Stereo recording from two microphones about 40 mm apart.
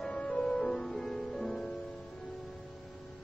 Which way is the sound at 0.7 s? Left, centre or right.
Centre.